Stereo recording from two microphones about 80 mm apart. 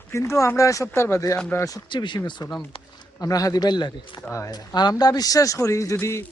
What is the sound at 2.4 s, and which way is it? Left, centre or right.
Speech, left.